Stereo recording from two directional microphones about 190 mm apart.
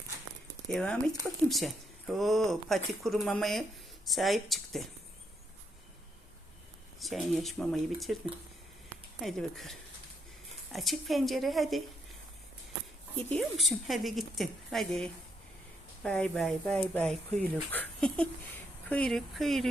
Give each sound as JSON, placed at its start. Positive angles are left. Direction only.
{"t": 0.7, "sound": "speech", "side_deg": 5}
{"t": 7.0, "sound": "speech", "side_deg": 0}
{"t": 13.3, "sound": "speech", "side_deg": 0}